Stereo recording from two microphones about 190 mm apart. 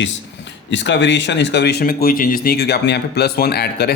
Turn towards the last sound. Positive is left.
turn(degrees=55)  # may be behind; listen again after turning